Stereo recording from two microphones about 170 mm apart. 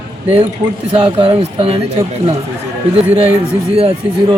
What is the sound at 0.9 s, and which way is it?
Speech, 35° right (ahead or behind).